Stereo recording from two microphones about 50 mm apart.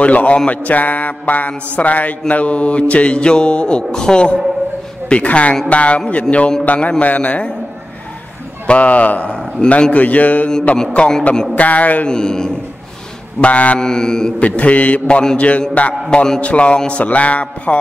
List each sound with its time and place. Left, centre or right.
0.0 s mantra: left
0.7 s a sound: left
1.5 s mantra: left
8.6 s mantra: left
11.5 s a sound: left
12.1 s mantra: centre
13.4 s mantra: left
13.7 s mantra: centre
14.4 s mantra: left